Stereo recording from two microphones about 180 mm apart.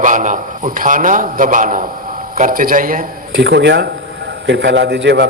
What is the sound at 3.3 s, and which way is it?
Speech, 75° right (ahead or behind).